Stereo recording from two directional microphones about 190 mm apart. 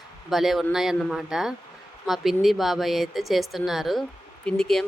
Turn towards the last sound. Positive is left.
turn(degrees=5)  # may be behind; listen again after turning